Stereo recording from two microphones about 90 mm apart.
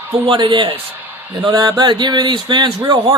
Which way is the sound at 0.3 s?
60° right (ahead or behind).